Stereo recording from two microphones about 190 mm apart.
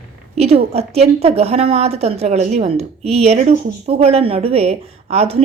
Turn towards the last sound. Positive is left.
turn(degrees=-30)  # may be behind; listen again after turning